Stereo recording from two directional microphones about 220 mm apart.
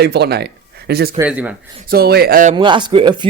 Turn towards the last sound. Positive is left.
turn(degrees=-20)  # may be behind; listen again after turning